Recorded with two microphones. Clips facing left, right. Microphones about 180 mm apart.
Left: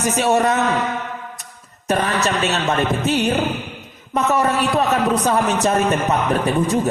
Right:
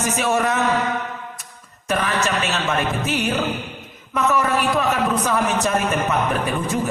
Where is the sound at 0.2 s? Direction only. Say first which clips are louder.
Left 4 dB; 35° left (ahead or behind).